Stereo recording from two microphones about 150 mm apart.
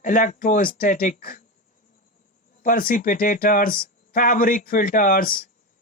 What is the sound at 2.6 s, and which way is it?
Speech, 70° left (ahead or behind).